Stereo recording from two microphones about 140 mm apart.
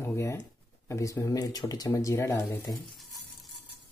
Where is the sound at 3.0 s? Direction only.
Centre (ahead or behind).